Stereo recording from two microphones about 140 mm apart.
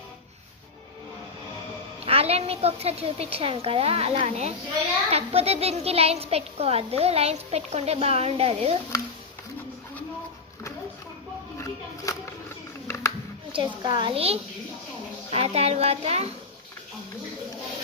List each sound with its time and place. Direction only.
2.0 s a child's voice: 45° right (ahead or behind)
12.0 s a sound: 20° left (ahead or behind)
13.5 s a child's voice: 35° right (ahead or behind)